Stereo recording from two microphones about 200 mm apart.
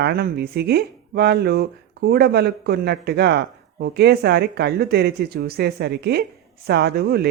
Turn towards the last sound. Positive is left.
turn(degrees=-50)  # may be behind; listen again after turning